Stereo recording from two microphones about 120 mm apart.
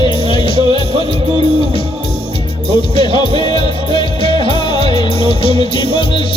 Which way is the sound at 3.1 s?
40° left (ahead or behind).